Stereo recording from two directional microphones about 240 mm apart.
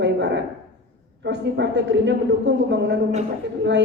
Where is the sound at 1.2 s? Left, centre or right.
Right.